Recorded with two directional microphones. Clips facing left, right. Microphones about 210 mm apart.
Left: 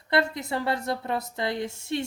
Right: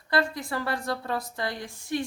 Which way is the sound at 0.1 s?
25° left (ahead or behind).